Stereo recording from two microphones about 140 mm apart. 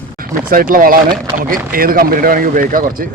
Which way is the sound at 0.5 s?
85° right.